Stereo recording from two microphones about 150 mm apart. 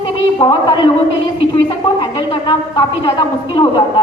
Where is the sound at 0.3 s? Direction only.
30° left (ahead or behind).